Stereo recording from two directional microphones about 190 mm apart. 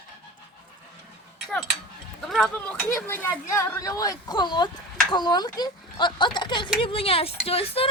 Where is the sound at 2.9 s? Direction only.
15° left (ahead or behind).